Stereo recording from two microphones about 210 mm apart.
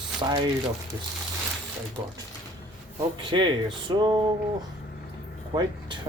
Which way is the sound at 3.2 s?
25° right (ahead or behind).